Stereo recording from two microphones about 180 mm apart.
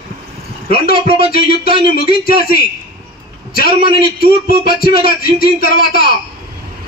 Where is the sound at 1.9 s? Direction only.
55° left (ahead or behind).